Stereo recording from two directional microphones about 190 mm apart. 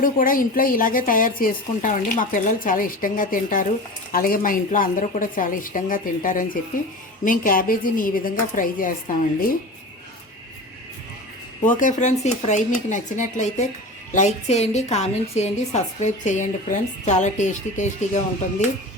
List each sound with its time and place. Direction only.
0.0 s a woman's voice: 45° left (ahead or behind)
11.8 s a woman's voice: 40° left (ahead or behind)